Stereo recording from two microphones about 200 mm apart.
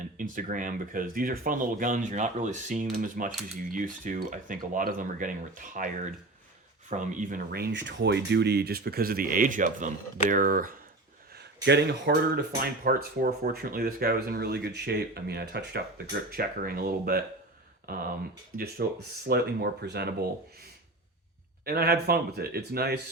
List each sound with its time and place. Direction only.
0.2 s speech: 40° right (ahead or behind)
6.9 s speech: 40° right (ahead or behind)
11.3 s speech: 55° right (ahead or behind)
21.6 s speech: 50° right (ahead or behind)